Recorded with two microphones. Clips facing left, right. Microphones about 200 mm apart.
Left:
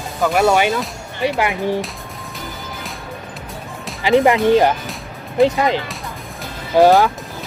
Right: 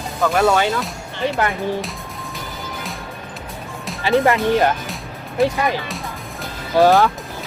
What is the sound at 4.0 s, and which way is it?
Speech, 15° left (ahead or behind).